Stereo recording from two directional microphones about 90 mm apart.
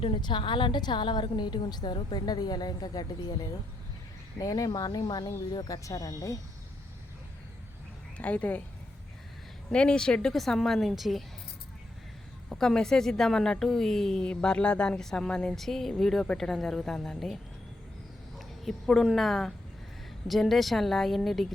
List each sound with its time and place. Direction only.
0.0 s a woman's voice: 65° left (ahead or behind); by 6.4 s 40° left (ahead or behind)
8.2 s speech: 15° left (ahead or behind)
9.7 s a woman's voice: 10° left (ahead or behind)
12.5 s a woman's voice: 5° left (ahead or behind)